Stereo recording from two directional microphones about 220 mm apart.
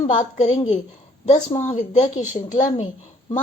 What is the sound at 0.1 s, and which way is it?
Speech, 35° left (ahead or behind).